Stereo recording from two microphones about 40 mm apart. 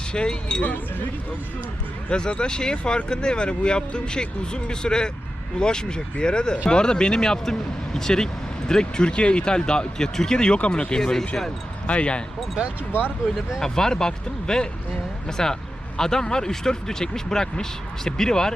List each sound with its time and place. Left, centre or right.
0.1 s speech: left
0.6 s speech: left
2.0 s speech: left
11.9 s speech: left
13.6 s speech: centre